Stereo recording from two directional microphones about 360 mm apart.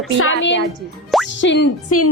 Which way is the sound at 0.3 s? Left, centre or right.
Left.